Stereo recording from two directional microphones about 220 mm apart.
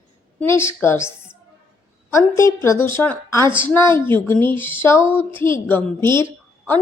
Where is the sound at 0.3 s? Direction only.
10° left (ahead or behind).